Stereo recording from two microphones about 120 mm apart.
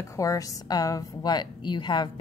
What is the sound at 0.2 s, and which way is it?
A woman's voice, 30° left (ahead or behind).